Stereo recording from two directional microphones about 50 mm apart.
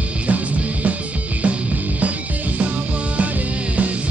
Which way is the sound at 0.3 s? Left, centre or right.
Right.